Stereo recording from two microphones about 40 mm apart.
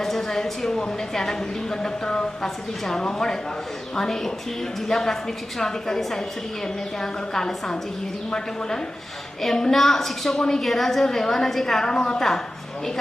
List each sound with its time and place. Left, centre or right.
0.0 s a woman's voice: centre
9.4 s a woman's voice: centre
11.9 s a woman's voice: centre